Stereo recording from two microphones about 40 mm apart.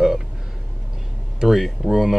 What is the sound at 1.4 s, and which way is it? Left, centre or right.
Speech, centre.